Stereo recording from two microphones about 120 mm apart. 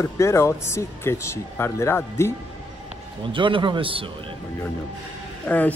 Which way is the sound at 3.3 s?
45° right (ahead or behind).